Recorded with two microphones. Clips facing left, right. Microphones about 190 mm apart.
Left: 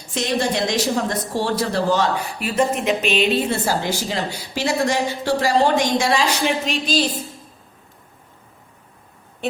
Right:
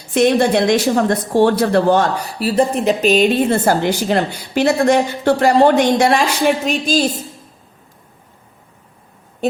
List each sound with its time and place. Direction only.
0.1 s a woman's voice: 55° right (ahead or behind)
2.1 s a woman's voice: 35° right (ahead or behind)